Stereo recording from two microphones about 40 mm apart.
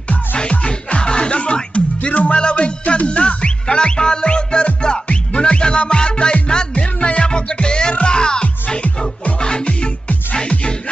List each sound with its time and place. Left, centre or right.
0.4 s music: left